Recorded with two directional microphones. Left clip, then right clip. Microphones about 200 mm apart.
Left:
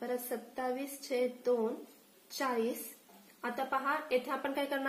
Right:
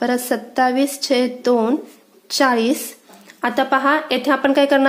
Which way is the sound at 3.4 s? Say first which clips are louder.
Right 18 dB; 50° right (ahead or behind).